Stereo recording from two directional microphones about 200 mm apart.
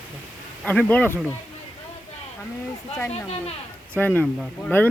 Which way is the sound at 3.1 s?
30° left (ahead or behind).